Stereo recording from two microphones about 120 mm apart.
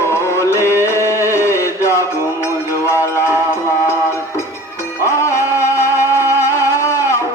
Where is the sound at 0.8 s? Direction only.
25° left (ahead or behind).